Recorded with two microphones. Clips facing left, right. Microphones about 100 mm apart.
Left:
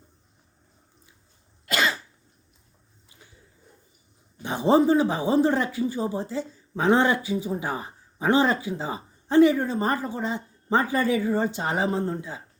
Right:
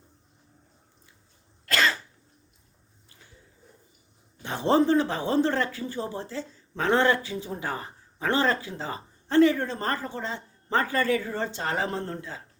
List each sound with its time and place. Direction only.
1.6 s cough: 15° left (ahead or behind)
4.4 s speech: 15° left (ahead or behind)